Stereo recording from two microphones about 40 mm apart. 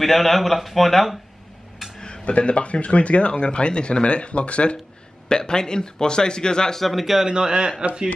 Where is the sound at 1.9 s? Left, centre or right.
Left.